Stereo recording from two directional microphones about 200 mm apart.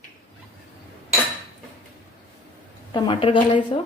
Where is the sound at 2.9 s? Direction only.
25° left (ahead or behind).